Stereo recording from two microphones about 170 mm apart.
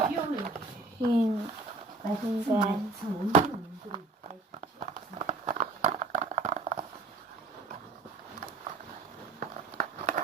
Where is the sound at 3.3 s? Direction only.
45° right (ahead or behind).